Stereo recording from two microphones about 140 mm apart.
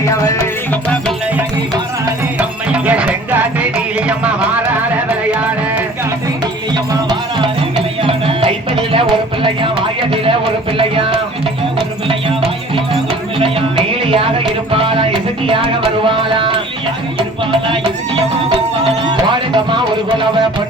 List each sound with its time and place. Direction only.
0.0 s music: 25° left (ahead or behind)
0.7 s music: 5° left (ahead or behind)
2.4 s music: 10° right (ahead or behind)
6.9 s music: 35° right (ahead or behind)
14.0 s music: 40° right (ahead or behind)
19.0 s music: 35° right (ahead or behind)